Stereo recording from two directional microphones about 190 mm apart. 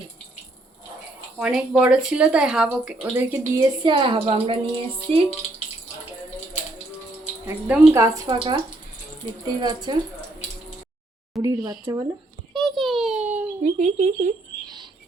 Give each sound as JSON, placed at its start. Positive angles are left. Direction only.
{"t": 1.4, "sound": "speech", "side_deg": -5}
{"t": 3.6, "sound": "a woman's voice", "side_deg": -25}
{"t": 7.4, "sound": "a woman's voice", "side_deg": -15}
{"t": 11.3, "sound": "a woman's voice", "side_deg": -20}
{"t": 12.5, "sound": "a sound", "side_deg": 0}
{"t": 13.6, "sound": "speech", "side_deg": -40}